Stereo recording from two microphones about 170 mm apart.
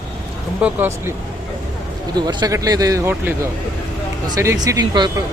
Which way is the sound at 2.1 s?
25° right (ahead or behind).